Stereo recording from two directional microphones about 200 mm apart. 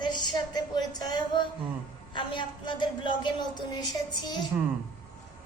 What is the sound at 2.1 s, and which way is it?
A woman's voice, 25° left (ahead or behind).